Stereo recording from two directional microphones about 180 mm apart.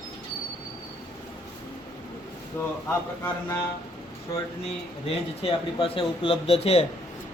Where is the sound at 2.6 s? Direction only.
10° left (ahead or behind).